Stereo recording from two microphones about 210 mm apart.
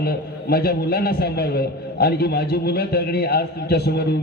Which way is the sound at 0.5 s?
50° left (ahead or behind).